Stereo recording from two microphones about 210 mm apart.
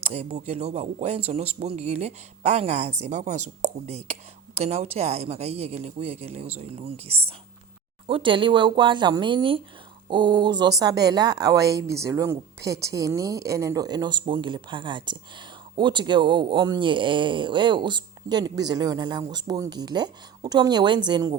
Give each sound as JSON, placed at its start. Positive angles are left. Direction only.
{"t": 0.0, "sound": "a woman's voice", "side_deg": -30}